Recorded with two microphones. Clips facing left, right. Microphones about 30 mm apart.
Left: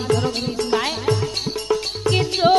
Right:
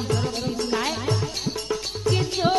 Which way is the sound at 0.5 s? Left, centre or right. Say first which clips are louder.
Left 3 dB; left.